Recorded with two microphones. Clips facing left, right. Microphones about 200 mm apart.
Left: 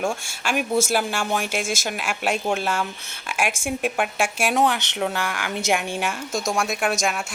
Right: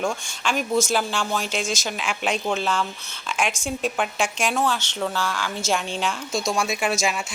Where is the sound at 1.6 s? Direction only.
50° left (ahead or behind).